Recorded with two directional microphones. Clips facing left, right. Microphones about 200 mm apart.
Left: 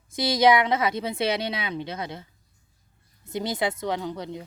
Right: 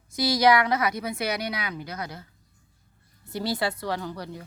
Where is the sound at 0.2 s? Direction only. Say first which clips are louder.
Left 1 dB; 25° left (ahead or behind).